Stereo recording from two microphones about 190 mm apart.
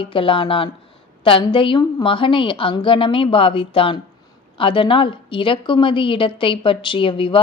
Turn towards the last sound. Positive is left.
turn(degrees=25)  # may be behind; listen again after turning